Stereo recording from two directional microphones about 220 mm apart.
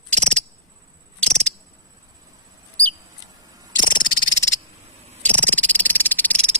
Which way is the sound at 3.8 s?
20° left (ahead or behind).